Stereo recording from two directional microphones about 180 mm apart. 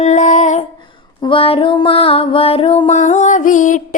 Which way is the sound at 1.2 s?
30° left (ahead or behind).